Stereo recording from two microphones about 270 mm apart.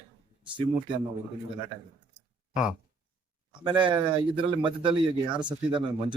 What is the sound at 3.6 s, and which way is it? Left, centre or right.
Speech, centre.